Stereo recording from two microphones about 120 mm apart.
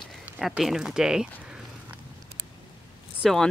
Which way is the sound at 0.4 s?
Centre (ahead or behind).